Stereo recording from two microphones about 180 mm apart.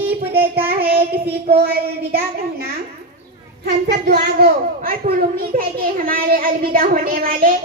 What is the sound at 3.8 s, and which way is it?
A child's voice, 60° right (ahead or behind).